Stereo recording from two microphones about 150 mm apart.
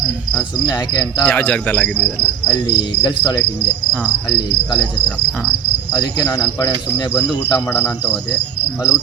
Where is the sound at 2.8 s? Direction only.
30° left (ahead or behind).